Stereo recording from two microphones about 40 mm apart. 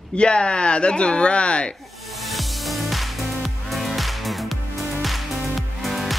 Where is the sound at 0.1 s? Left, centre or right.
Left.